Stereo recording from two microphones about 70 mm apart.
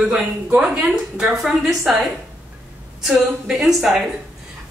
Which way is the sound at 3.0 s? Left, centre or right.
Centre.